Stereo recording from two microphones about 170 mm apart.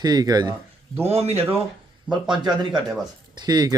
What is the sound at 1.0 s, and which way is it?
Speech, 35° right (ahead or behind).